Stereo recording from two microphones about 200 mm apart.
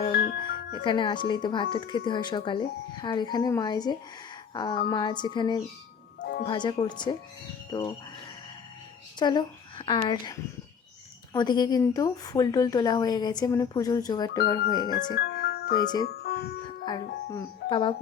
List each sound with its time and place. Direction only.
0.1 s music: 50° left (ahead or behind)
0.8 s a woman's voice: 25° left (ahead or behind)
6.1 s music: 55° left (ahead or behind)
6.4 s a woman's voice: 25° left (ahead or behind)
9.1 s a woman's voice: 20° left (ahead or behind)
11.3 s a woman's voice: 20° left (ahead or behind)
15.1 s music: 50° left (ahead or behind)
15.7 s a woman's voice: 20° left (ahead or behind)
16.8 s music: 20° left (ahead or behind)